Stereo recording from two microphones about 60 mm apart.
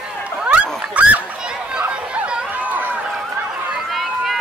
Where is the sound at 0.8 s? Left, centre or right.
Right.